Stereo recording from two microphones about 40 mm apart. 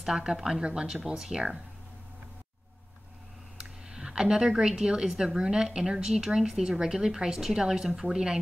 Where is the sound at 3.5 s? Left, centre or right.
Centre.